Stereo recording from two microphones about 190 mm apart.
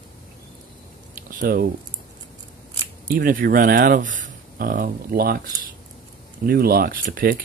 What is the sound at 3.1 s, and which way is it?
Speech, 50° right (ahead or behind).